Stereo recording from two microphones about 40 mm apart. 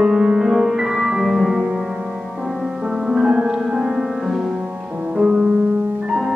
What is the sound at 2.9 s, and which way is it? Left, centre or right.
Music, centre.